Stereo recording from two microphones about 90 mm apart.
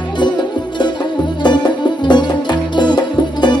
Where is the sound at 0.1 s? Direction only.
55° left (ahead or behind).